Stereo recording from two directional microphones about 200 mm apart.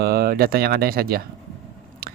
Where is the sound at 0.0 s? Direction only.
50° right (ahead or behind).